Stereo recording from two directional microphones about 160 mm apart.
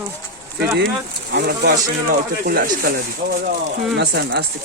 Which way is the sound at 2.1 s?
65° right (ahead or behind).